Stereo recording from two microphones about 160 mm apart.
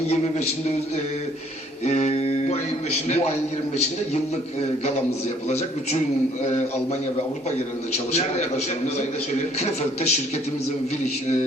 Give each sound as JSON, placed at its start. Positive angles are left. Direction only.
{"t": 1.8, "sound": "a man's voice", "side_deg": 45}
{"t": 5.5, "sound": "a man's voice", "side_deg": 40}
{"t": 7.9, "sound": "a man's voice", "side_deg": 45}